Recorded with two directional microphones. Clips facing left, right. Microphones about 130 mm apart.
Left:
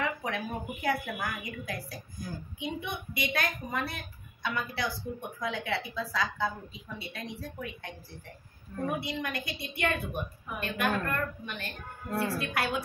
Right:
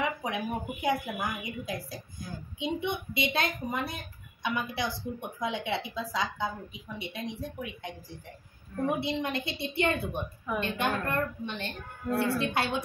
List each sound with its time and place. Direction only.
0.0 s a woman's voice: 20° right (ahead or behind)